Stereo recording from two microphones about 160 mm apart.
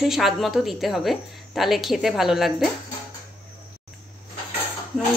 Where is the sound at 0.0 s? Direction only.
Centre (ahead or behind).